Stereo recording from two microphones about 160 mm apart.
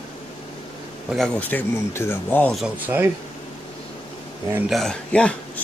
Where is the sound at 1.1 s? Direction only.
5° left (ahead or behind).